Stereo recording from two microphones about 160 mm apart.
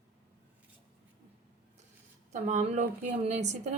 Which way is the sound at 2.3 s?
45° right (ahead or behind).